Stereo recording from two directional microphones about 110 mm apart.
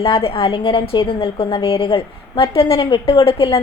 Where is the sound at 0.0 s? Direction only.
60° left (ahead or behind).